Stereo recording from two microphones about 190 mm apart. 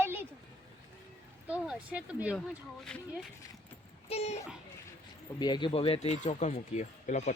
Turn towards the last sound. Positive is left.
turn(degrees=40)  # may be behind; listen again after turning